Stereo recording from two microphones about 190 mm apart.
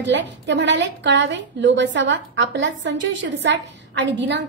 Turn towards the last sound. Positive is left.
turn(degrees=-70)  # may be behind; listen again after turning